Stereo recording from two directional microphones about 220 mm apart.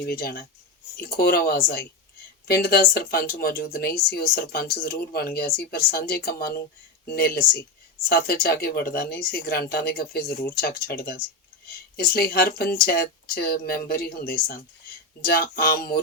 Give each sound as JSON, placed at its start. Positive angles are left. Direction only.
{"t": 0.0, "sound": "speech", "side_deg": 45}